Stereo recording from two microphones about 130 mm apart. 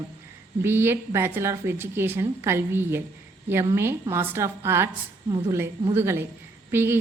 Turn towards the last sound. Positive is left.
turn(degrees=-20)  # may be behind; listen again after turning